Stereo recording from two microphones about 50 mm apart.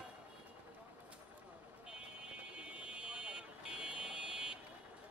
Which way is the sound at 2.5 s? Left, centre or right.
Right.